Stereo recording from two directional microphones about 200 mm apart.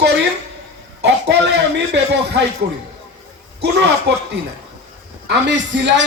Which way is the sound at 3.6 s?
55° right (ahead or behind).